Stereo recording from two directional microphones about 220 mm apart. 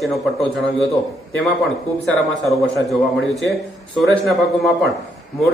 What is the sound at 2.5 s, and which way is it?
A man's voice, centre (ahead or behind).